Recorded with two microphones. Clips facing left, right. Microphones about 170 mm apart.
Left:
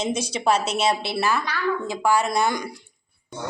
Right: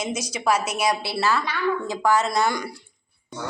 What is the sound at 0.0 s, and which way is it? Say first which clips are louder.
A woman's voice: left 2 dB; 30° left (ahead or behind).